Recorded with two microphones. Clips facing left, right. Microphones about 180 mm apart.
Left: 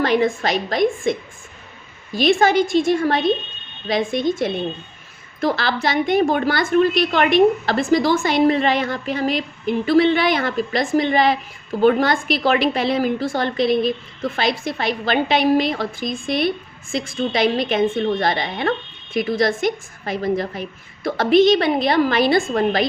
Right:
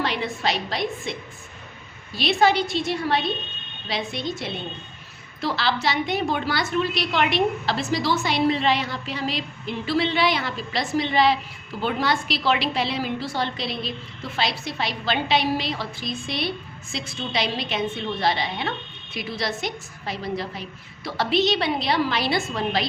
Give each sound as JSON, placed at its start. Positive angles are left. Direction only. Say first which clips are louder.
{"t": 0.0, "sound": "a woman's voice", "louder": "left 8 dB", "side_deg": 45}
{"t": 2.1, "sound": "a woman's voice", "louder": "left 5 dB", "side_deg": 45}